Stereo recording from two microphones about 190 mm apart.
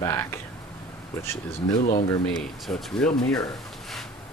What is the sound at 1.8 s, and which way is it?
Speech, 40° left (ahead or behind).